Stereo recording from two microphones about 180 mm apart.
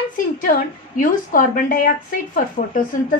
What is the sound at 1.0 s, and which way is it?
A woman's voice, 50° left (ahead or behind).